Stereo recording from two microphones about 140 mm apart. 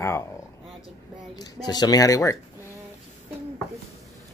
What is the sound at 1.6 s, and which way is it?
Speech, 30° left (ahead or behind).